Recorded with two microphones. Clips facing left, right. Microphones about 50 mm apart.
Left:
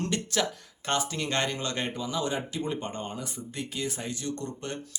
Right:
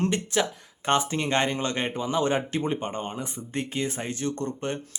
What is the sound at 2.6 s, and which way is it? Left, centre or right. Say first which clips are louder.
Speech: right 4 dB; right.